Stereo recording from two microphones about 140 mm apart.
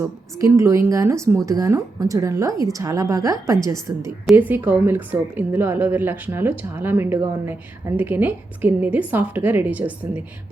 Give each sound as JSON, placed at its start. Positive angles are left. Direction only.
{"t": 0.0, "sound": "a woman's voice", "side_deg": -20}